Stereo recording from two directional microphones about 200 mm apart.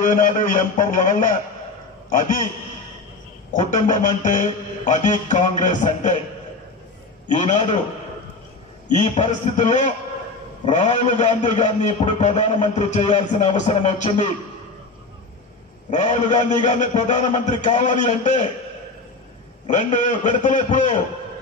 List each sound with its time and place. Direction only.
0.0 s a man's voice: 40° left (ahead or behind)
3.7 s a man's voice: 40° left (ahead or behind)
7.2 s a man's voice: 35° left (ahead or behind)
8.8 s a man's voice: 35° left (ahead or behind)
15.9 s a man's voice: 35° left (ahead or behind)
19.7 s a man's voice: 35° left (ahead or behind)